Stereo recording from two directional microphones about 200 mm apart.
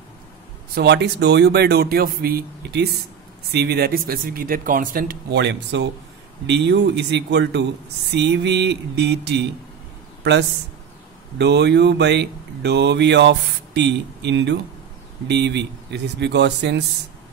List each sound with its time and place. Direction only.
0.7 s speech: 55° right (ahead or behind)
11.3 s speech: 60° right (ahead or behind)